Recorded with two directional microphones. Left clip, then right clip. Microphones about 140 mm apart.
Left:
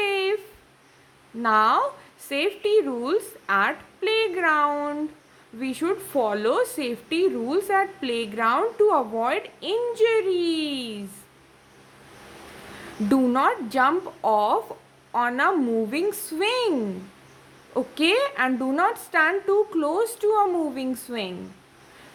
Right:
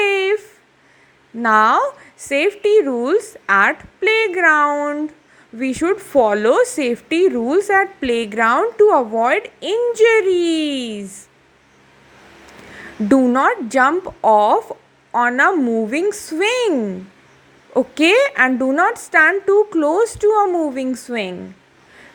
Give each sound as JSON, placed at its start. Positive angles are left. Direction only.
{"t": 0.0, "sound": "a sound", "side_deg": -35}
{"t": 1.4, "sound": "a woman's voice", "side_deg": -35}
{"t": 13.1, "sound": "a woman's voice", "side_deg": -30}
{"t": 17.7, "sound": "a woman's voice", "side_deg": -40}